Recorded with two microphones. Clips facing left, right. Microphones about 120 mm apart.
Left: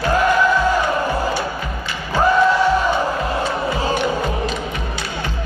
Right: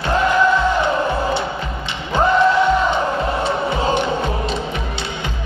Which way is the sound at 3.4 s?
25° right (ahead or behind).